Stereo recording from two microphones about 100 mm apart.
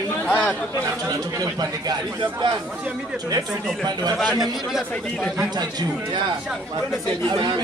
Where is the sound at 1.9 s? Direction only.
45° right (ahead or behind).